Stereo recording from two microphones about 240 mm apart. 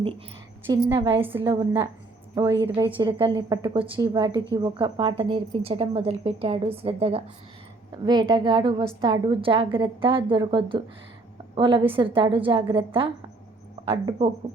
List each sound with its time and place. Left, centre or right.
0.7 s a woman's voice: centre